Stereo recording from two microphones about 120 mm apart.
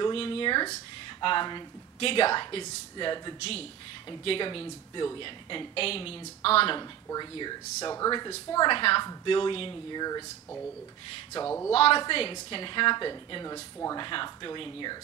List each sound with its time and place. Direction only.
0.0 s a woman's voice: 50° left (ahead or behind)
6.8 s a woman's voice: 35° left (ahead or behind)
11.4 s speech: 20° left (ahead or behind)
11.7 s a woman's voice: 55° left (ahead or behind)